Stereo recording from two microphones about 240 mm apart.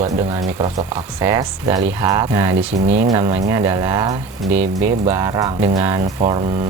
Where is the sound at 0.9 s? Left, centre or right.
Centre.